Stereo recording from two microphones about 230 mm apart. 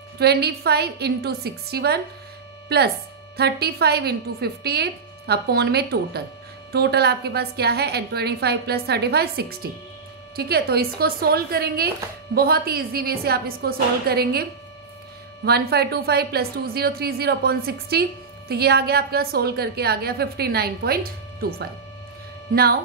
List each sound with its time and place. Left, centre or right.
0.2 s a woman's voice: right